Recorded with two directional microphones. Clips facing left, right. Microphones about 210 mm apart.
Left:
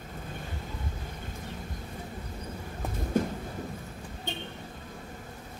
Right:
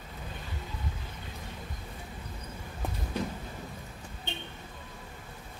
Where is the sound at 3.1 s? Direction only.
50° left (ahead or behind).